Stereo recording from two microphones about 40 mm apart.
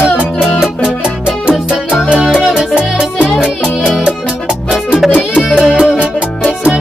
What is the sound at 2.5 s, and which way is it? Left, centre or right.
Music, right.